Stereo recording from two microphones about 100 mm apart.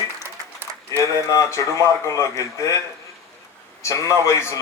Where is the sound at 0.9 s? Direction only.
30° left (ahead or behind).